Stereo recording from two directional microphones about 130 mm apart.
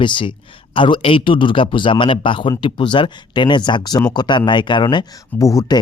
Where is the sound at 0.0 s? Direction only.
40° left (ahead or behind).